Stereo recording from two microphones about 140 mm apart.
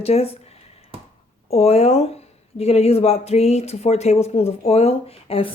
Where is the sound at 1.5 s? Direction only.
45° left (ahead or behind).